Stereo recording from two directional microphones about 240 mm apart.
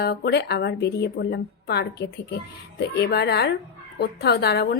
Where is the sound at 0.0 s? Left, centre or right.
Left.